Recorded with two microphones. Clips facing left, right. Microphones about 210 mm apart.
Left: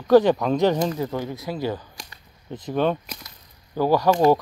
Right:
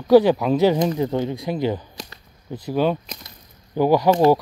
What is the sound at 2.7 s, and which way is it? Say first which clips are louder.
Speech: right 2 dB; 5° right (ahead or behind).